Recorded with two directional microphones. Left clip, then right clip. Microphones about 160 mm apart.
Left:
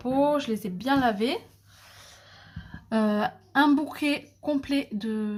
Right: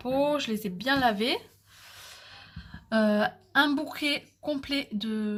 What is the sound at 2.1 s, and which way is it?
A woman's voice, 15° right (ahead or behind).